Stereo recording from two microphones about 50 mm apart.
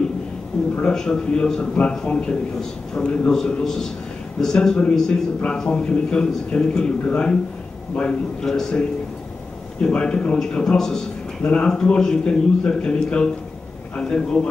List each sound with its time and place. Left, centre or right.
0.5 s a sound: centre
0.9 s a man's voice: centre
3.3 s a man's voice: centre
9.8 s a man's voice: centre